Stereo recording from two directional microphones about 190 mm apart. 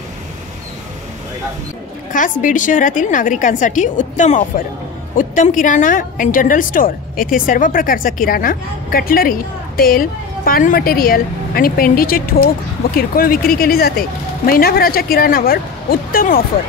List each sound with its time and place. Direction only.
2.1 s a woman's voice: 45° left (ahead or behind)